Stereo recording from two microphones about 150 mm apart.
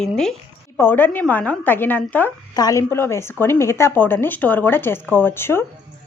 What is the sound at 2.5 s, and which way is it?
A woman's voice, 25° left (ahead or behind).